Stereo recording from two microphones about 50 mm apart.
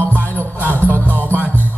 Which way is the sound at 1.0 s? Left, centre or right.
Left.